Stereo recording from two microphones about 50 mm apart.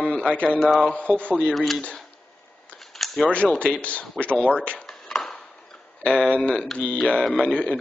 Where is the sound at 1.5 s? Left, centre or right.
Centre.